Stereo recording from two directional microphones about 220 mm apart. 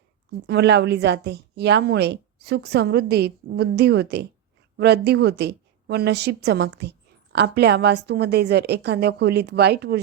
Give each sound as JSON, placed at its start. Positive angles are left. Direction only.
{"t": 0.3, "sound": "a woman's voice", "side_deg": -50}